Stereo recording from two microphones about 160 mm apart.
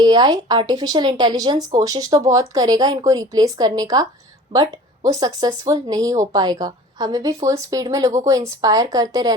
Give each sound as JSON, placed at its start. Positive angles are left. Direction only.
{"t": 0.0, "sound": "speech", "side_deg": -25}